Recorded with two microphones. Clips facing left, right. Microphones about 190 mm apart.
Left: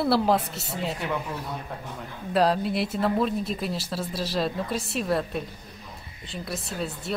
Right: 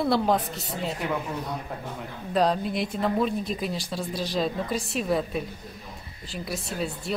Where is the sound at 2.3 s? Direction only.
5° left (ahead or behind).